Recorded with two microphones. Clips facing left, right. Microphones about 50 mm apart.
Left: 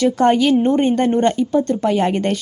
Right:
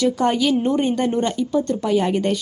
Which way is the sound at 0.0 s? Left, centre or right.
Left.